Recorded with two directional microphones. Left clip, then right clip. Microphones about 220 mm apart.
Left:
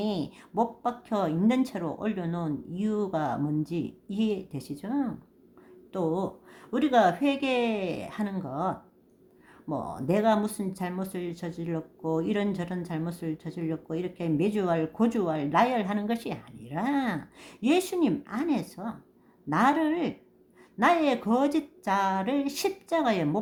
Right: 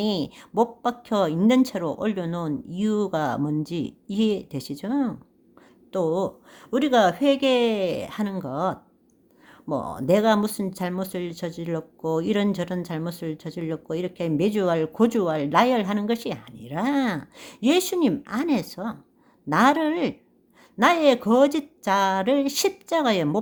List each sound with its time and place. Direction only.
0.0 s speech: 35° right (ahead or behind)